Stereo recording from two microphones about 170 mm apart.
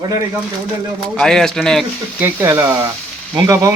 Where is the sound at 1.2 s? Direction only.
5° left (ahead or behind).